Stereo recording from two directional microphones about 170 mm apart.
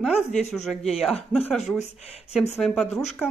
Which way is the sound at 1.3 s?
10° left (ahead or behind).